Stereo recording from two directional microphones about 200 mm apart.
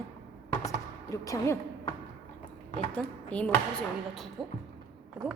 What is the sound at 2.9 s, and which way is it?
Speech, 5° left (ahead or behind).